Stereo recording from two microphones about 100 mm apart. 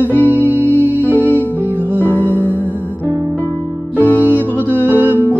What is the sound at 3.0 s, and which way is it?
Music, 20° right (ahead or behind).